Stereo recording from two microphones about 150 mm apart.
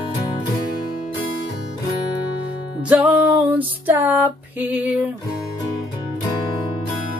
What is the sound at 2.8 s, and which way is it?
Music, 10° right (ahead or behind).